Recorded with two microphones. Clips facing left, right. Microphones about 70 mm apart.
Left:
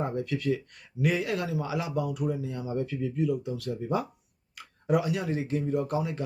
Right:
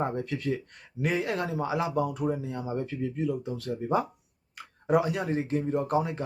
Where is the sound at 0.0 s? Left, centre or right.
Right.